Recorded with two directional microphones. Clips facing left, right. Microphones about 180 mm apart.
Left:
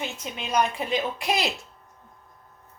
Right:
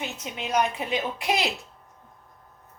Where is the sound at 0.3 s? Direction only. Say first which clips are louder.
Even; 20° right (ahead or behind).